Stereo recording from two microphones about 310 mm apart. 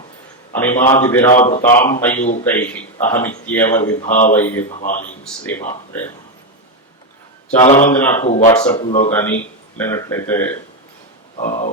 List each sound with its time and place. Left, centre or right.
0.5 s speech: centre
1.4 s speech: left
1.6 s speech: centre
4.0 s speech: left
4.4 s speech: centre
4.8 s speech: left
7.8 s speech: centre
8.3 s speech: left
11.3 s speech: left